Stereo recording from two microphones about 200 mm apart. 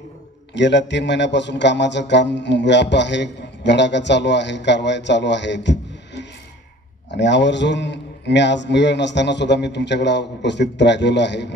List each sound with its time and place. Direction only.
0.6 s a man's voice: 60° left (ahead or behind)